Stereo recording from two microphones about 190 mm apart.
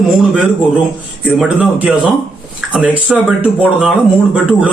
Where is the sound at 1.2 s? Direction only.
5° right (ahead or behind).